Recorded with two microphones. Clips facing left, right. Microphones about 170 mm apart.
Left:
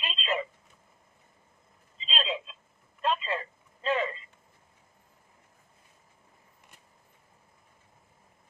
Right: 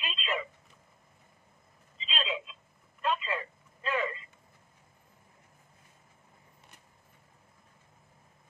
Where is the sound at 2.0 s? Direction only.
30° left (ahead or behind).